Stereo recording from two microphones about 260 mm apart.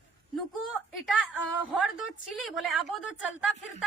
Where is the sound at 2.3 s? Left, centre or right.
Centre.